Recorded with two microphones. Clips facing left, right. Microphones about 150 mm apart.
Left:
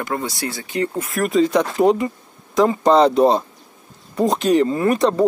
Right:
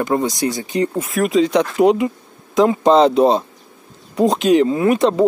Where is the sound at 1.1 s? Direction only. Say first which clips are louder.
Right 1 dB; centre (ahead or behind).